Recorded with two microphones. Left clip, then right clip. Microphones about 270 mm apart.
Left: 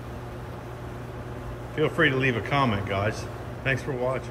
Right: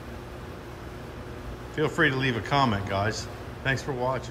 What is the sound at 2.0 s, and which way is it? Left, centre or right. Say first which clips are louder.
Speech: left 2 dB; right.